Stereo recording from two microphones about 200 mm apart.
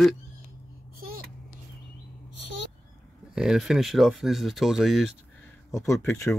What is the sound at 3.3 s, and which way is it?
Speech, 5° right (ahead or behind).